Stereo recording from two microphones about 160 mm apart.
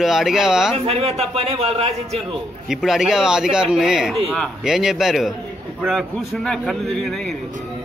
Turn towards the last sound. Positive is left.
turn(degrees=5)  # may be behind; listen again after turning